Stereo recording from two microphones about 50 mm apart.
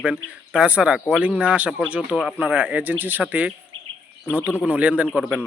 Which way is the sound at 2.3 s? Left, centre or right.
Right.